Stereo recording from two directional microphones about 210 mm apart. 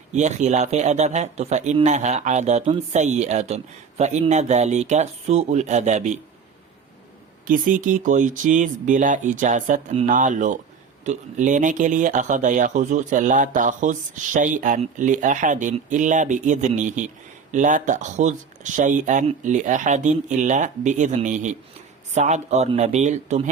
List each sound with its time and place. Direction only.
0.1 s a man's voice: 35° right (ahead or behind)
7.4 s a man's voice: 40° right (ahead or behind)